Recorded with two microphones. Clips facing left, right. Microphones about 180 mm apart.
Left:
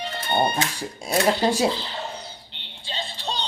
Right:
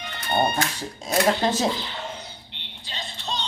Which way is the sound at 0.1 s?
30° left (ahead or behind).